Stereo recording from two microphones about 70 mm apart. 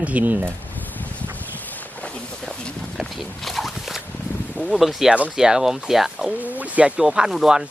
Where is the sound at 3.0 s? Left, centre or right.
Centre.